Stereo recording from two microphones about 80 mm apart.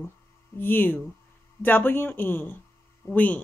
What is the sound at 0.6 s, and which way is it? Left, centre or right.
A woman's voice, left.